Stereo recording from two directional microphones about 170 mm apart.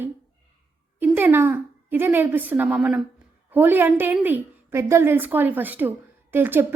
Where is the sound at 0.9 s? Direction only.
10° right (ahead or behind).